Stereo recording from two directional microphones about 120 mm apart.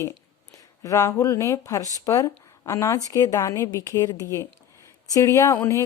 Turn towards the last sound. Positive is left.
turn(degrees=25)  # may be behind; listen again after turning